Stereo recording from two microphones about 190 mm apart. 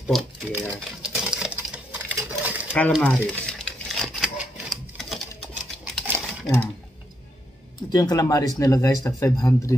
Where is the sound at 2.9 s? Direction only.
5° left (ahead or behind).